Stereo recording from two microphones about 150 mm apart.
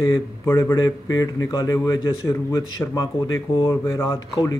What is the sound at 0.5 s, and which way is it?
A man's voice, 20° left (ahead or behind).